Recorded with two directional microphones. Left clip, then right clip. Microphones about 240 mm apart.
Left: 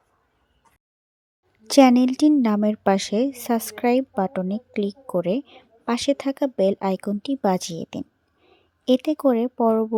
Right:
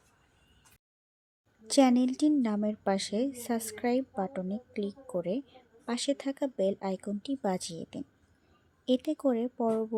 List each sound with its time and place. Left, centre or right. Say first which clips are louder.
1.6 s a woman's voice: left 10 dB; left